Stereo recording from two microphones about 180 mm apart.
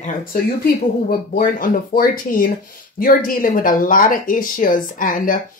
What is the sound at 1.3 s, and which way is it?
Speech, 50° left (ahead or behind).